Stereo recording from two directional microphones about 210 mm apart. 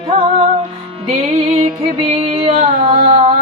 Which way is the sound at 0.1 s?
30° right (ahead or behind).